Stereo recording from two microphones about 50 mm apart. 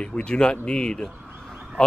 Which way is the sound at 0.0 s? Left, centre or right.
Centre.